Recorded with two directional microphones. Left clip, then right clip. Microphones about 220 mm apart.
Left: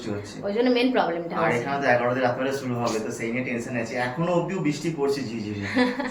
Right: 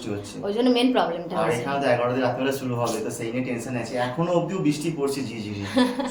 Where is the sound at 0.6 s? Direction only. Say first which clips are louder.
Right 1 dB; 20° right (ahead or behind).